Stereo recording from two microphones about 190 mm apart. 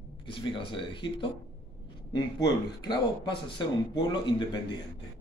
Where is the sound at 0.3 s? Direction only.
25° left (ahead or behind).